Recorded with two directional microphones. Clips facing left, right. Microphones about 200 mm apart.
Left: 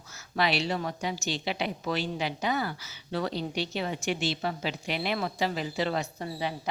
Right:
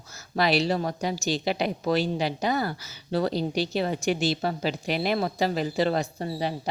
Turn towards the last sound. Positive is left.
turn(degrees=-35)  # may be behind; listen again after turning